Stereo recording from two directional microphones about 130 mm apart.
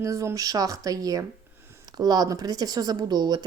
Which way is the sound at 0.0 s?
25° right (ahead or behind).